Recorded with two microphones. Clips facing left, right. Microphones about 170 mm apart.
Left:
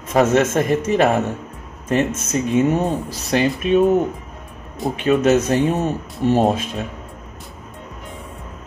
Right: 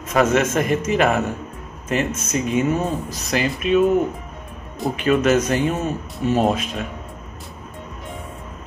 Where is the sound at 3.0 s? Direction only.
25° left (ahead or behind).